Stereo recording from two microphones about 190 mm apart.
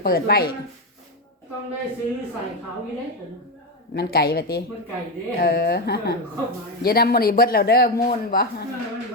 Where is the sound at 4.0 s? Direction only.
55° left (ahead or behind).